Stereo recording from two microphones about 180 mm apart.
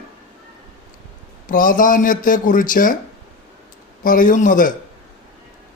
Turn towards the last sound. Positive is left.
turn(degrees=45)  # may be behind; listen again after turning